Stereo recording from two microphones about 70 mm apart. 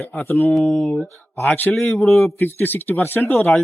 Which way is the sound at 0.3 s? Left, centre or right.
Left.